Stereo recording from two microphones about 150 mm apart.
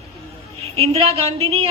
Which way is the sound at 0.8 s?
40° right (ahead or behind).